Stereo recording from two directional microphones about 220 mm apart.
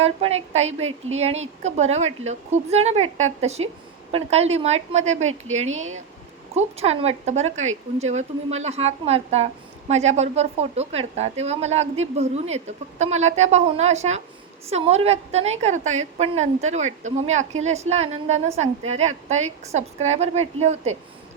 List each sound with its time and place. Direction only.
0.0 s a woman's voice: 30° right (ahead or behind)
6.5 s a woman's voice: 30° right (ahead or behind)